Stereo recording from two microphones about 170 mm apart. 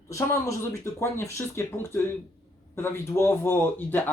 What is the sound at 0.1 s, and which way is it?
Speech, 20° left (ahead or behind).